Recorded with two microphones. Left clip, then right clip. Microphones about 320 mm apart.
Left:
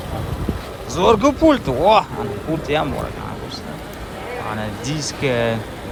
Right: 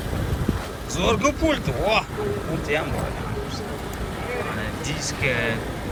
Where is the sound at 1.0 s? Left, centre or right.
Centre.